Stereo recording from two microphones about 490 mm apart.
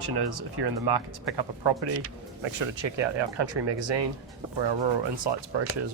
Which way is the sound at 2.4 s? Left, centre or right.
Right.